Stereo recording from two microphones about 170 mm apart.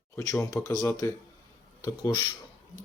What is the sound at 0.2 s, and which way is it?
Speech, 20° left (ahead or behind).